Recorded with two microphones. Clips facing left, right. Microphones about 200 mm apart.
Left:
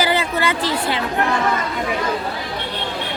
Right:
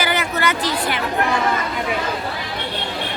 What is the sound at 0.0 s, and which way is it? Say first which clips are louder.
Chatter: left 2 dB; 30° left (ahead or behind).